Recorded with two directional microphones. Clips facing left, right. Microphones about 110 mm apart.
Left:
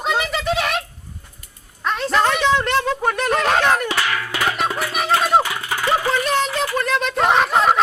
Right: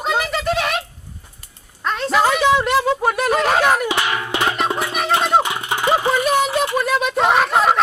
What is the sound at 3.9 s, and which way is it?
Music, 20° right (ahead or behind).